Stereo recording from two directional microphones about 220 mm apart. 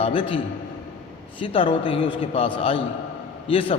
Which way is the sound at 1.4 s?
25° left (ahead or behind).